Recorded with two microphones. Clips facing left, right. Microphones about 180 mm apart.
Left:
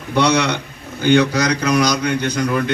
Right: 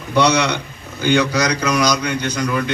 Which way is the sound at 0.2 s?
55° left (ahead or behind).